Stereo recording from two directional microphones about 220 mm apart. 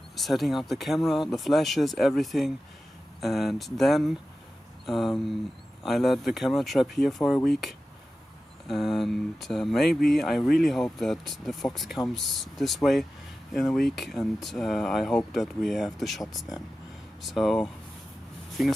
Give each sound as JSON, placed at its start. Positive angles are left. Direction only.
{"t": 0.1, "sound": "speech", "side_deg": 0}